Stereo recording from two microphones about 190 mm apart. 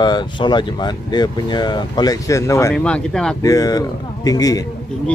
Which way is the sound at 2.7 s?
5° left (ahead or behind).